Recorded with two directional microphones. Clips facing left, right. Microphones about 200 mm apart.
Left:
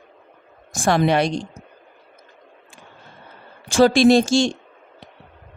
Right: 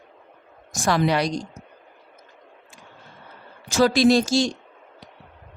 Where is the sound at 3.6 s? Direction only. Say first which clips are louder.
Left 4 dB; 30° left (ahead or behind).